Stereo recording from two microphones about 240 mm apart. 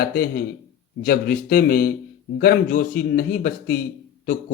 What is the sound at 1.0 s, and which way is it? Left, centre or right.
Speech, left.